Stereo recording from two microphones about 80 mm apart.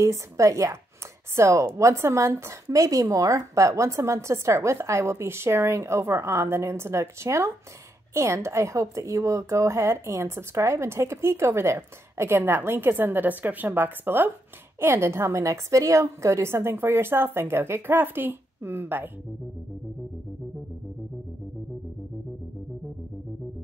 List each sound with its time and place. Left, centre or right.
0.0 s a woman's voice: right